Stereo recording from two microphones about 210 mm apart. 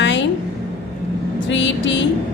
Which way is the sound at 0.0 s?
60° left (ahead or behind).